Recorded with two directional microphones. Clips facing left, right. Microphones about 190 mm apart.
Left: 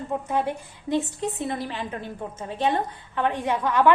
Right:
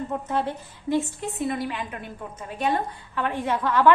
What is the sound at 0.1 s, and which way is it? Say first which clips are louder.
A woman's voice: left 5 dB; 15° left (ahead or behind).